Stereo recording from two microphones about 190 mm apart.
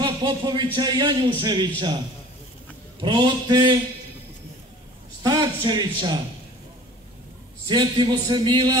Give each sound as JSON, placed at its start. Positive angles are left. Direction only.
{"t": 0.0, "sound": "a man's voice", "side_deg": -20}
{"t": 3.0, "sound": "a man's voice", "side_deg": -25}
{"t": 5.2, "sound": "a man's voice", "side_deg": -20}
{"t": 7.6, "sound": "a man's voice", "side_deg": -25}